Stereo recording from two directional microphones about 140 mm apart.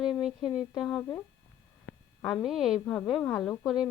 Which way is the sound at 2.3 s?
Centre (ahead or behind).